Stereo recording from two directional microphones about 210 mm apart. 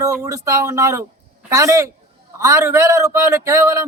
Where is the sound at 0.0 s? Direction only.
15° right (ahead or behind).